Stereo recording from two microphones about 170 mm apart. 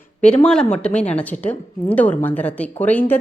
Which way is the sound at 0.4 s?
5° left (ahead or behind).